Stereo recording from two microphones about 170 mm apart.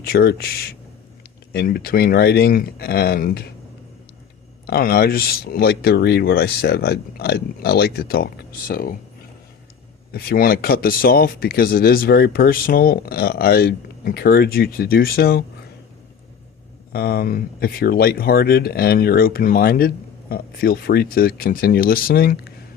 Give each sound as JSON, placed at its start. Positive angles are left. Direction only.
{"t": 0.0, "sound": "speech", "side_deg": 65}
{"t": 4.6, "sound": "speech", "side_deg": 65}
{"t": 10.1, "sound": "speech", "side_deg": 60}
{"t": 16.9, "sound": "speech", "side_deg": 65}